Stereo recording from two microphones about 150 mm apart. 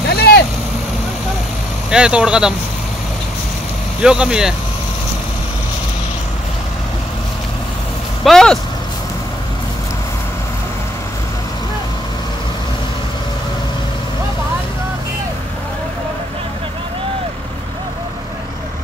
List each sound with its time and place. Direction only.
0.1 s vehicle: 90° left
1.9 s speech: 5° right (ahead or behind)
4.0 s speech: 5° right (ahead or behind)
8.2 s speech: centre (ahead or behind)